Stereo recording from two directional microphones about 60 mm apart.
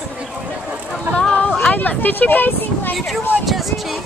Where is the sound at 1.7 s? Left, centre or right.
Left.